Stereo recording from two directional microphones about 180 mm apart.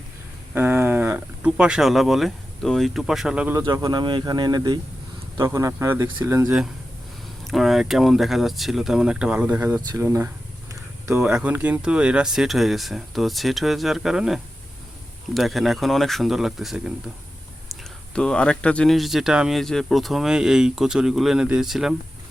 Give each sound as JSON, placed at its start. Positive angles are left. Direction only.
{"t": 0.5, "sound": "speech", "side_deg": -10}
{"t": 7.4, "sound": "speech", "side_deg": 0}
{"t": 10.7, "sound": "a sound", "side_deg": -15}
{"t": 11.3, "sound": "speech", "side_deg": -5}